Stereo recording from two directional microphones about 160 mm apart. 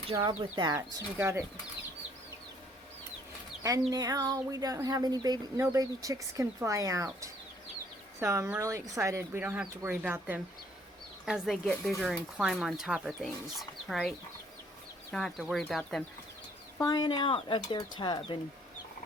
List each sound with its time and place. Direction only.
0.2 s speech: 25° right (ahead or behind)
3.6 s speech: 20° right (ahead or behind); by 14.1 s centre (ahead or behind)
15.1 s speech: centre (ahead or behind)
16.7 s speech: 25° left (ahead or behind)